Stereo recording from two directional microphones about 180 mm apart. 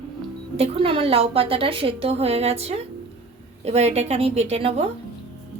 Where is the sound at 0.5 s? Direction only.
30° right (ahead or behind).